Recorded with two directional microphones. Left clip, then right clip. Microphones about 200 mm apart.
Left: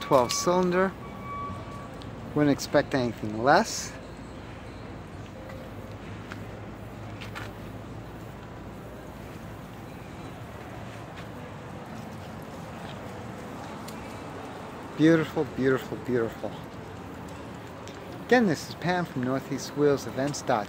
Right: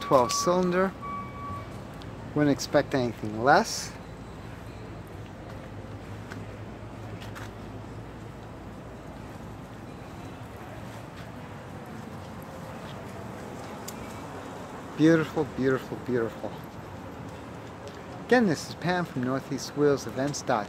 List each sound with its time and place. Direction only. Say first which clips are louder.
0.0 s speech: even; centre (ahead or behind)
2.3 s speech: even; centre (ahead or behind)
15.0 s speech: even; centre (ahead or behind)
18.3 s speech: even; 5° left (ahead or behind)